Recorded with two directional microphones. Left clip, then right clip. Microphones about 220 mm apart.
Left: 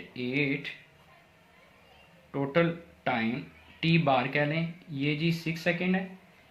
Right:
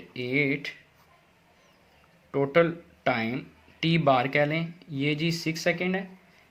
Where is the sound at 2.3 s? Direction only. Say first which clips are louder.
Right 5 dB; 50° right (ahead or behind).